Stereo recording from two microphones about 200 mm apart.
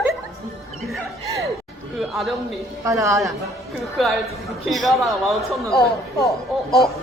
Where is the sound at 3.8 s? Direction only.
Centre (ahead or behind).